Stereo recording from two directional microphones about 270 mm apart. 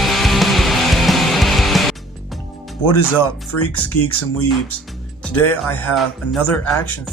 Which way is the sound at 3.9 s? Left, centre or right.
Left.